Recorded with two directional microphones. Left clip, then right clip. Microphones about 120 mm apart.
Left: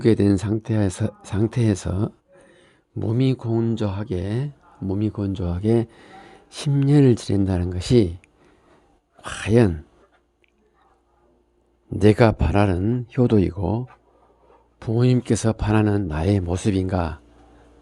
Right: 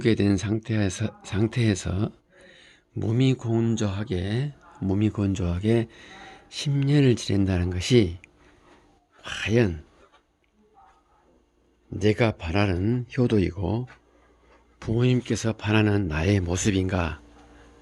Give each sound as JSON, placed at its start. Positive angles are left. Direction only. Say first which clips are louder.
{"t": 0.0, "sound": "speech", "louder": "left 5 dB", "side_deg": 40}
{"t": 4.8, "sound": "speech", "louder": "even", "side_deg": 15}
{"t": 5.5, "sound": "speech", "louder": "left 5 dB", "side_deg": 30}
{"t": 11.9, "sound": "speech", "louder": "left 7 dB", "side_deg": 50}